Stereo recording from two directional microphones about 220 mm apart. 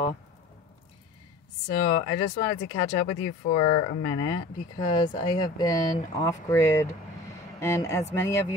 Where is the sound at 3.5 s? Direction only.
20° left (ahead or behind).